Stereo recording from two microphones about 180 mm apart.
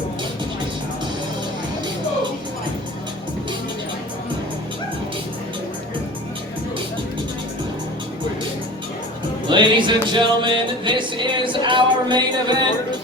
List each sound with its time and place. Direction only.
9.5 s music: 25° right (ahead or behind)